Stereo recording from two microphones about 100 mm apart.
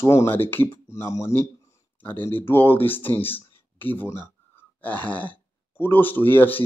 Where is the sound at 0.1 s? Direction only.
25° left (ahead or behind).